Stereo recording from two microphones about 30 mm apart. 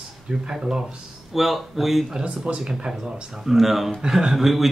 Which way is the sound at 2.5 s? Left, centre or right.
Right.